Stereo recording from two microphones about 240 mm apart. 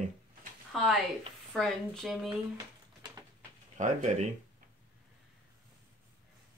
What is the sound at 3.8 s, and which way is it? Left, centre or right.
Speech, right.